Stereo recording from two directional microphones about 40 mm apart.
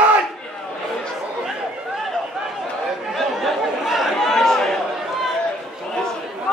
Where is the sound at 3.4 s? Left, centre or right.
Centre.